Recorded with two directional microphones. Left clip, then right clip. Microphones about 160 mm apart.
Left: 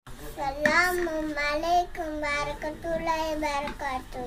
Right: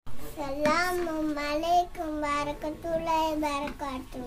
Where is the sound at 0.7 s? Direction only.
25° right (ahead or behind).